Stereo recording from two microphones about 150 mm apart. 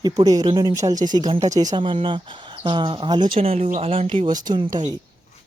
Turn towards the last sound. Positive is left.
turn(degrees=-30)  # may be behind; listen again after turning